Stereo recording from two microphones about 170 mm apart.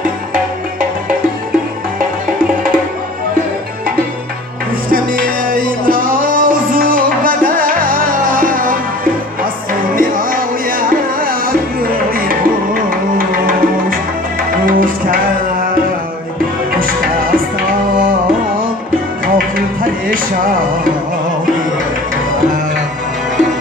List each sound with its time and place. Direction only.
4.9 s music: 55° right (ahead or behind)
9.9 s music: 55° right (ahead or behind)
16.7 s music: 55° right (ahead or behind)
19.2 s music: 55° right (ahead or behind)